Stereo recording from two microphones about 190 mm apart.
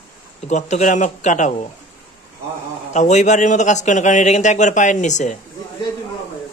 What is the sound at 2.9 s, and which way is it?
A man's voice, 40° left (ahead or behind).